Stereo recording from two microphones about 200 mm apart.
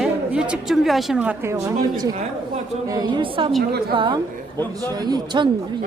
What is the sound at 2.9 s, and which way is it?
A woman's voice, 20° right (ahead or behind).